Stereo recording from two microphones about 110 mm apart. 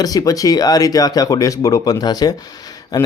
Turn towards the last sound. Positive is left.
turn(degrees=35)  # may be behind; listen again after turning